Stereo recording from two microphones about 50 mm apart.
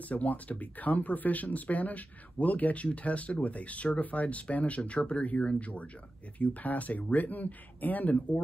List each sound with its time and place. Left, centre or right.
0.1 s speech: left